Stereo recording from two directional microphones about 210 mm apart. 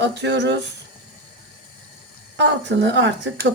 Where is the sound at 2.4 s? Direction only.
55° right (ahead or behind).